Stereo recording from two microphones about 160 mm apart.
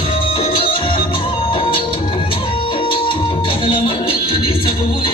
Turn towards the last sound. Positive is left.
turn(degrees=35)  # may be behind; listen again after turning